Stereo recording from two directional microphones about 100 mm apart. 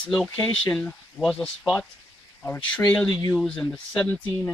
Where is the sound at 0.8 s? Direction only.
5° left (ahead or behind).